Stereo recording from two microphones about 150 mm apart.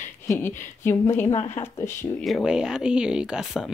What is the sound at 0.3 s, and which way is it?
A woman's voice, 15° left (ahead or behind).